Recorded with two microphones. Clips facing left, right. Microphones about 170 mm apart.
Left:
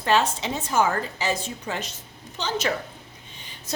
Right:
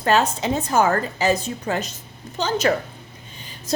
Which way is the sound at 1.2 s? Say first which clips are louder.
Right 7 dB; 40° right (ahead or behind).